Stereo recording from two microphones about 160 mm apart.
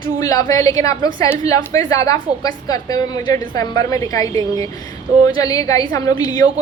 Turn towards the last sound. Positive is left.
turn(degrees=25)  # may be behind; listen again after turning